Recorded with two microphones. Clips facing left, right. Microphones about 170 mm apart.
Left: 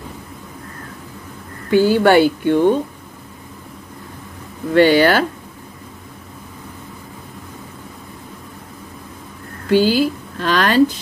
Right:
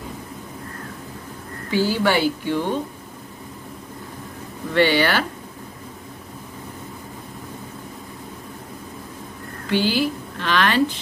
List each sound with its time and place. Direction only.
1.7 s speech: 55° left (ahead or behind)
4.7 s speech: 45° left (ahead or behind)
9.7 s a woman's voice: 40° left (ahead or behind)